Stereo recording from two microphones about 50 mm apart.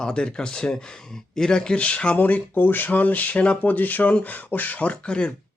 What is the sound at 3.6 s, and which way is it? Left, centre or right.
Speech, left.